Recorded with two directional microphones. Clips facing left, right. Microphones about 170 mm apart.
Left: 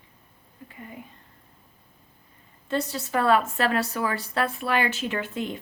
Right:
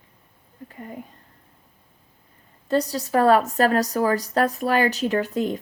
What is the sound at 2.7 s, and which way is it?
A woman's voice, 40° right (ahead or behind).